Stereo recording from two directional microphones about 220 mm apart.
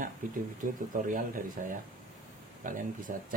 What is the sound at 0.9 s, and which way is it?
Speech, 40° right (ahead or behind).